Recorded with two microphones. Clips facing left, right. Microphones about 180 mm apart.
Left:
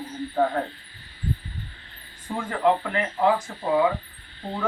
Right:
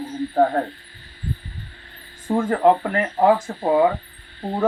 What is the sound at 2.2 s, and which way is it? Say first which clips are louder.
Speech: right 6 dB; 45° right (ahead or behind).